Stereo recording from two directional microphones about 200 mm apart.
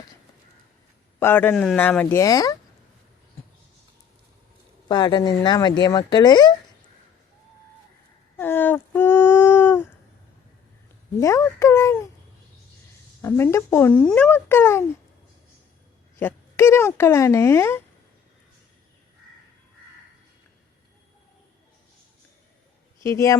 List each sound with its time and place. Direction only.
1.2 s speech: 10° left (ahead or behind)
4.9 s speech: 20° left (ahead or behind)
8.4 s a sound: 10° left (ahead or behind)
11.2 s speech: 15° left (ahead or behind)
13.2 s speech: 10° left (ahead or behind)
16.1 s speech: 10° left (ahead or behind)
23.0 s speech: 15° left (ahead or behind)